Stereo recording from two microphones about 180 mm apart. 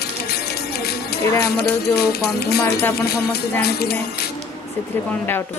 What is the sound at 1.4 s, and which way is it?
Speech, 60° left (ahead or behind).